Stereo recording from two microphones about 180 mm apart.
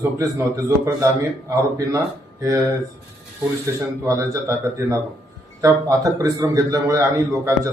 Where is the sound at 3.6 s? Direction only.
15° right (ahead or behind).